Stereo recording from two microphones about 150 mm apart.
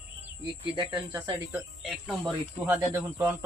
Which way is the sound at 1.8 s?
Centre (ahead or behind).